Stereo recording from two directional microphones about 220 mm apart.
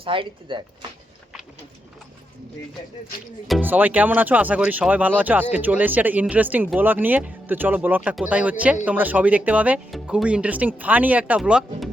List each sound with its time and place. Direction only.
0.0 s speech: 25° right (ahead or behind)
3.4 s speech: 5° right (ahead or behind)